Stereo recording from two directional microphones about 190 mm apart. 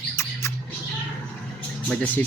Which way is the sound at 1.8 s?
5° left (ahead or behind).